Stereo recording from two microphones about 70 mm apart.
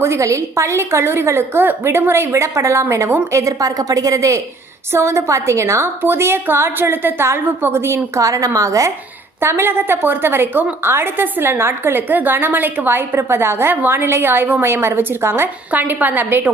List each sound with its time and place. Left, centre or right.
0.0 s a woman's voice: right
8.2 s a woman's voice: right
9.4 s a woman's voice: right